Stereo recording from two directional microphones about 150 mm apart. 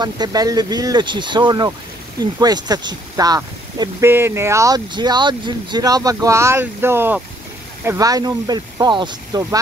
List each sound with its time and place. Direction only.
0.0 s speech: 25° right (ahead or behind)